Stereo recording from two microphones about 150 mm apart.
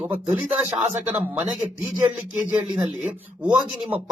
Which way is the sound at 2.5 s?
25° right (ahead or behind).